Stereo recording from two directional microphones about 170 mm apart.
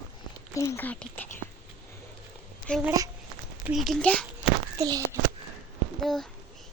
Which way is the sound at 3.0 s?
20° right (ahead or behind).